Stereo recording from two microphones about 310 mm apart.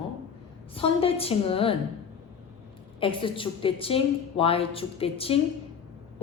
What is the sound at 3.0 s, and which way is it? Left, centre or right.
A woman's voice, centre.